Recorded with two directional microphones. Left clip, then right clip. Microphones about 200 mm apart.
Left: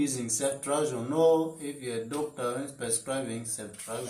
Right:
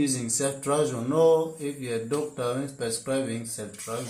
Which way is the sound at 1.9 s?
45° right (ahead or behind).